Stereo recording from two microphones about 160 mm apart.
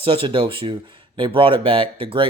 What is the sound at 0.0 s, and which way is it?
Speech, 35° right (ahead or behind).